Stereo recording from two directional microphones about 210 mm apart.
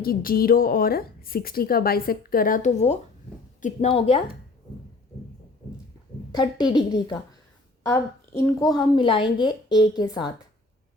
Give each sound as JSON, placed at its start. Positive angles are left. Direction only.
{"t": 0.0, "sound": "a woman's voice", "side_deg": 45}
{"t": 6.3, "sound": "a woman's voice", "side_deg": 20}